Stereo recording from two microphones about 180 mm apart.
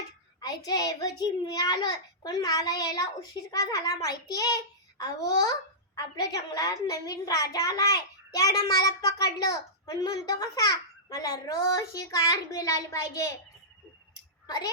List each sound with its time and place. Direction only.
0.4 s a child's voice: 20° left (ahead or behind)
14.4 s speech: 20° left (ahead or behind)